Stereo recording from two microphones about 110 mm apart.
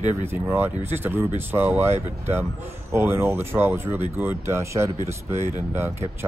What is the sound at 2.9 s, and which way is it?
Speech, 20° right (ahead or behind).